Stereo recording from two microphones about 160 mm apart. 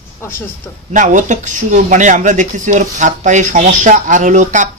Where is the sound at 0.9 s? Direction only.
50° right (ahead or behind).